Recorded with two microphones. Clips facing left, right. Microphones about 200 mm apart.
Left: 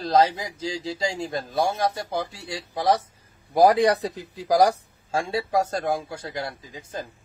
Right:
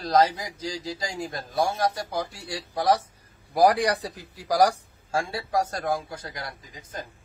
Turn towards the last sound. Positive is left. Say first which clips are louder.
# left 6 dB
turn(degrees=25)  # may be behind; listen again after turning